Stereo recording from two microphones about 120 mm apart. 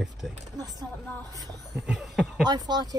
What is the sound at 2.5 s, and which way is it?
Speech, 35° right (ahead or behind).